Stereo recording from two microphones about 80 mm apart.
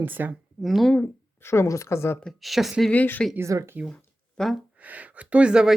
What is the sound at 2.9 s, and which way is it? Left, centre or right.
Speech, centre.